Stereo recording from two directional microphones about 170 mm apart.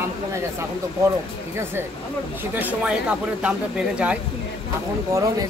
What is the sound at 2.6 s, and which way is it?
Speech, 5° right (ahead or behind).